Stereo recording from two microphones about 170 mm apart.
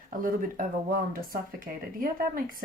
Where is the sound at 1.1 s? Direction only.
55° right (ahead or behind).